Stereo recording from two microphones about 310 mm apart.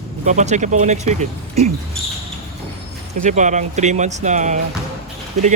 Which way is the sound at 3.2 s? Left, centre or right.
Right.